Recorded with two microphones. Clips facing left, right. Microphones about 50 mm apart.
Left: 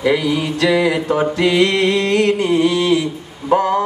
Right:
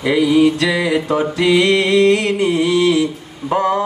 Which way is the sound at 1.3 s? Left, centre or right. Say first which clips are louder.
Right 3 dB; left.